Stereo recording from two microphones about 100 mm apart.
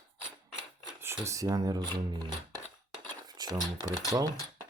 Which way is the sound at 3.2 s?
45° right (ahead or behind).